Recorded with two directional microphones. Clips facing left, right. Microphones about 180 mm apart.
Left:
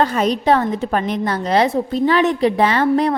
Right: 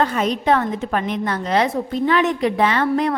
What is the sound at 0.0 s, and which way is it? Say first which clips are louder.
A woman's voice: left 3 dB; 35° left (ahead or behind).